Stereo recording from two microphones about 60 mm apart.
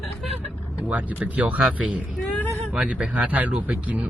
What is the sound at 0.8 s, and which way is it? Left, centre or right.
Speech, right.